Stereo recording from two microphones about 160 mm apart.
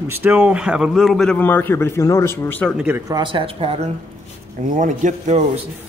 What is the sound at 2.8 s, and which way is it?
Speech, 10° right (ahead or behind).